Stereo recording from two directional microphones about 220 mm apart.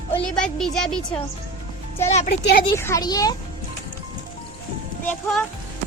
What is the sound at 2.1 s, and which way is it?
Speech, 30° left (ahead or behind).